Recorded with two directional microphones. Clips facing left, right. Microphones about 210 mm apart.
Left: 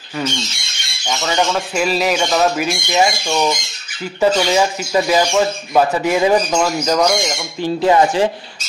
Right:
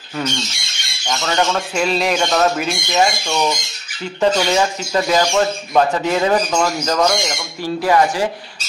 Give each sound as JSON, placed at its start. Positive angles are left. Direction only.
{"t": 1.0, "sound": "speech", "side_deg": 5}
{"t": 7.6, "sound": "speech", "side_deg": 25}